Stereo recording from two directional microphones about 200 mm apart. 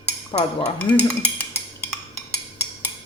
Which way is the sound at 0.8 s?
10° left (ahead or behind).